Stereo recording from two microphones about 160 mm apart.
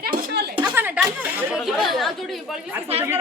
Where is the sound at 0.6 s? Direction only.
10° right (ahead or behind).